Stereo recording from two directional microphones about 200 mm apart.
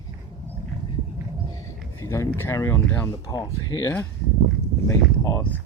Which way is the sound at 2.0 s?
15° left (ahead or behind).